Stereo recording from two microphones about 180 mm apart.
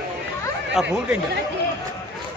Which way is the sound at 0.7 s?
5° right (ahead or behind).